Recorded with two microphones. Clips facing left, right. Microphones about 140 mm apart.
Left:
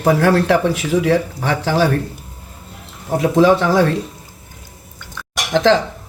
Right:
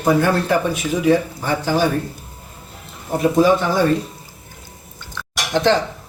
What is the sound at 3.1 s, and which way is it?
Speech, 90° left.